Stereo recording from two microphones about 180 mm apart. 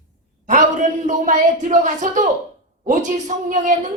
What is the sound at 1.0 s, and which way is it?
A woman's voice, 40° right (ahead or behind).